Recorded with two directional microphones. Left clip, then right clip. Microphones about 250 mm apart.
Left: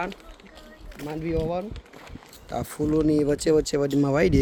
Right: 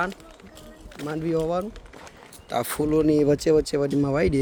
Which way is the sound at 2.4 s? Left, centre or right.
Right.